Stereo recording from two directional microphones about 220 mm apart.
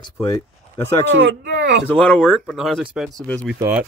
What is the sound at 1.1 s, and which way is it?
Speech, 55° right (ahead or behind).